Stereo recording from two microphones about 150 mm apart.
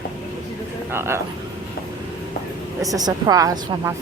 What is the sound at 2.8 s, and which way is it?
A woman's voice, 25° right (ahead or behind).